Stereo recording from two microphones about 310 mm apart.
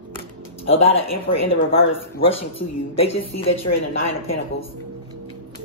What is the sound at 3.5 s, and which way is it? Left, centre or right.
Speech, left.